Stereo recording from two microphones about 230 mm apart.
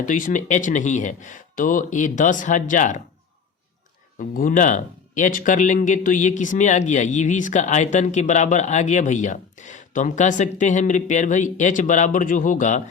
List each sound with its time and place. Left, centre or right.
0.0 s speech: left
4.2 s speech: left